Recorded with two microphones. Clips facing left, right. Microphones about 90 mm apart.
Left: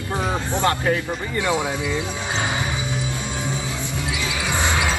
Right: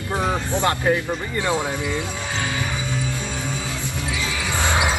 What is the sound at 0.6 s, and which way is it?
Speech, 20° right (ahead or behind).